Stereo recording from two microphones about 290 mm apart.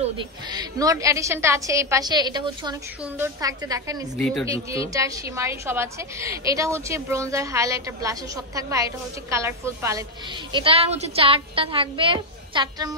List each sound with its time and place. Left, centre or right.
0.0 s a woman's voice: centre
4.2 s speech: centre
4.6 s a woman's voice: centre